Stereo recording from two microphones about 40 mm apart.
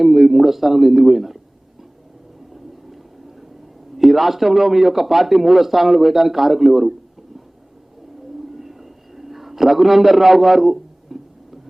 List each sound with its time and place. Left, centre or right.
0.0 s a man's voice: centre
3.9 s a man's voice: centre
8.5 s a sound: centre